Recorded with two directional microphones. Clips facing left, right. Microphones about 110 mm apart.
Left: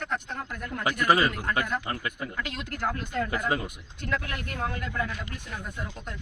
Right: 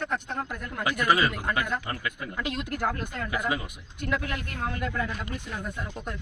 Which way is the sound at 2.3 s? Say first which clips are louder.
Right 3 dB; 15° right (ahead or behind).